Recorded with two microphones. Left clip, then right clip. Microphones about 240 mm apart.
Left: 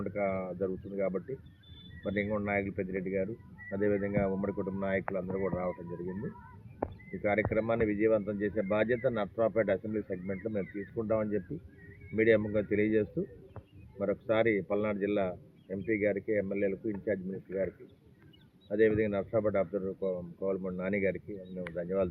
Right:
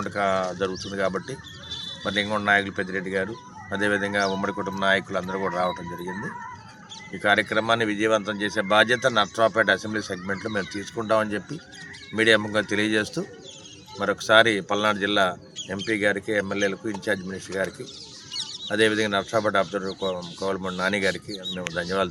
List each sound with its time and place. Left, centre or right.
0.2 s speech: right
2.9 s speech: right
3.7 s speech: right
7.2 s speech: centre
18.7 s speech: centre